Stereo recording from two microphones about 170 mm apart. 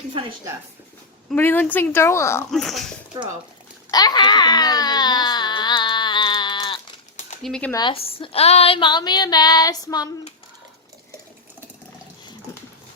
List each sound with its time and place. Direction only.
0.1 s a woman's voice: 30° right (ahead or behind)
1.4 s a woman's voice: 10° left (ahead or behind)
2.5 s speech: centre (ahead or behind)
3.9 s baby cry: 25° left (ahead or behind)
7.4 s speech: 5° left (ahead or behind)
7.7 s a woman's voice: 25° left (ahead or behind)